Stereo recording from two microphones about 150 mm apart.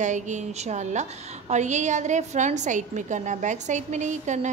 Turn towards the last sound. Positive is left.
turn(degrees=-55)  # may be behind; listen again after turning